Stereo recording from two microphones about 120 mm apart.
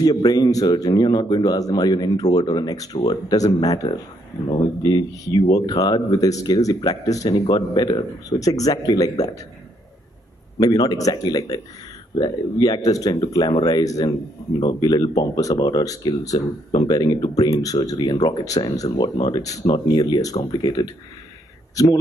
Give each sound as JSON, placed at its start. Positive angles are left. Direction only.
{"t": 0.0, "sound": "a man's voice", "side_deg": 30}
{"t": 10.6, "sound": "a man's voice", "side_deg": 30}